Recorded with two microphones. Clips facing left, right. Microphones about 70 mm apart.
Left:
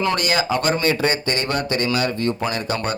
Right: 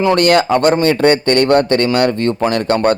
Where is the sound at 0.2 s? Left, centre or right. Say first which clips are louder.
Right 10 dB; right.